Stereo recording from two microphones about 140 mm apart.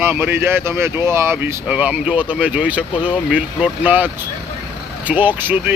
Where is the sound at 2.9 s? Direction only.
40° left (ahead or behind).